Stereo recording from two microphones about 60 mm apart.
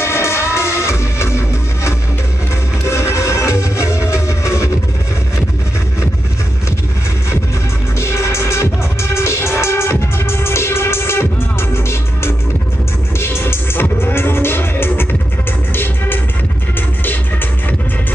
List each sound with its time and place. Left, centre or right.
0.0 s music: left
2.8 s music: left
8.0 s music: left